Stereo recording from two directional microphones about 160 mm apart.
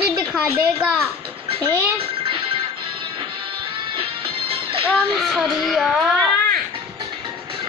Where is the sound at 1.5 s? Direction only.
35° right (ahead or behind).